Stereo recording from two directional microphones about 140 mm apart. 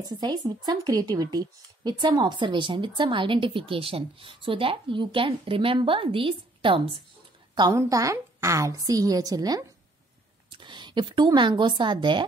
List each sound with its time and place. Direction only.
0.2 s a woman's voice: 30° right (ahead or behind)
7.5 s a woman's voice: 25° right (ahead or behind)